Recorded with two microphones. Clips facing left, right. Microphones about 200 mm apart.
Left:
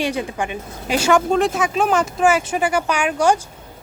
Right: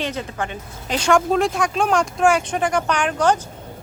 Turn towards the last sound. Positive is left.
turn(degrees=10)  # may be behind; listen again after turning